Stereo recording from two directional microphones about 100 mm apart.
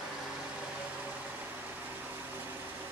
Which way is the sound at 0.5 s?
10° right (ahead or behind).